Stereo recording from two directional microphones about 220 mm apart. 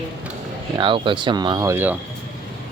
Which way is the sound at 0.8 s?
20° right (ahead or behind).